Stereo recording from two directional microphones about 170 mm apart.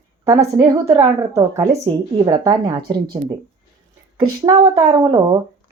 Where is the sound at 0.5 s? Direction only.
15° right (ahead or behind).